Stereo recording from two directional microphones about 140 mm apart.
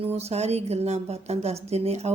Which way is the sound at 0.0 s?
50° right (ahead or behind).